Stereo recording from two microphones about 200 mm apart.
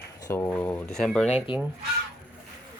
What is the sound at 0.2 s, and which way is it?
Speech, 15° left (ahead or behind).